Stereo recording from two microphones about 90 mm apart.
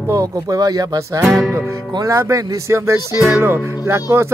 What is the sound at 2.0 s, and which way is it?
Speech, 40° right (ahead or behind).